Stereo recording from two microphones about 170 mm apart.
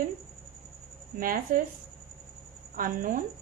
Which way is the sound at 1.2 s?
55° right (ahead or behind).